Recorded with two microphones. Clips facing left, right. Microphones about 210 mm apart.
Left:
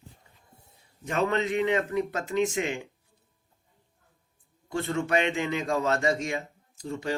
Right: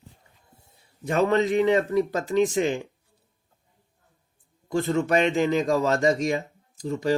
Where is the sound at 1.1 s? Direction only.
35° right (ahead or behind).